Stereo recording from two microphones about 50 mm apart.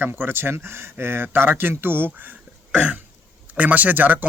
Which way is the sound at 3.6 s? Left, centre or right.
Right.